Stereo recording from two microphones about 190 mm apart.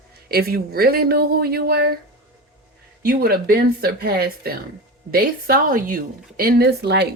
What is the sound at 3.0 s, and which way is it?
Speech, 50° right (ahead or behind).